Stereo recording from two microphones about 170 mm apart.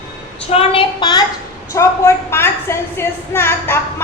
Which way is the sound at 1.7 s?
15° left (ahead or behind).